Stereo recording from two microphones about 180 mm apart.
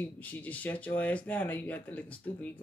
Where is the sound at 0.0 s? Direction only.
10° left (ahead or behind).